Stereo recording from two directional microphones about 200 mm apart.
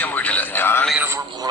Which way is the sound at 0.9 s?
10° right (ahead or behind).